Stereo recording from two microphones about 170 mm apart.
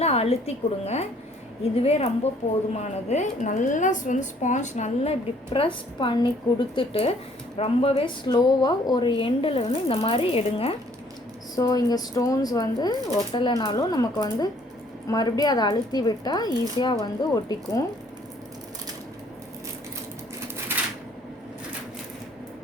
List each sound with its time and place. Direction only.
0.0 s a woman's voice: 35° left (ahead or behind)
5.5 s a woman's voice: 30° left (ahead or behind)
11.5 s a woman's voice: 20° left (ahead or behind)